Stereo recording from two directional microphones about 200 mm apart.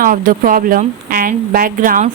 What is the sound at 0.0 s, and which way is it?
A woman's voice, 40° right (ahead or behind).